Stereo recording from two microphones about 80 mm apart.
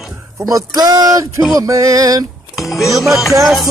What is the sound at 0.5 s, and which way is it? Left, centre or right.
Speech, right.